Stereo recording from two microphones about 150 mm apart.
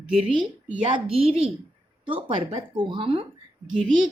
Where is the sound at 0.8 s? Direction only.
40° right (ahead or behind).